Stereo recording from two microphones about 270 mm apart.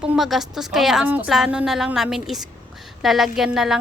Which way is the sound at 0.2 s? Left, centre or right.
Centre.